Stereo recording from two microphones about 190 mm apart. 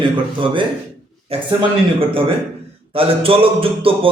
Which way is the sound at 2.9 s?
30° right (ahead or behind).